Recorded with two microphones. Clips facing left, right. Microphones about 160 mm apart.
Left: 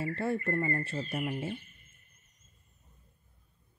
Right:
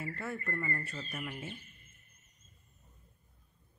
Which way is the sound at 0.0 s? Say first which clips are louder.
Left 8 dB; 30° left (ahead or behind).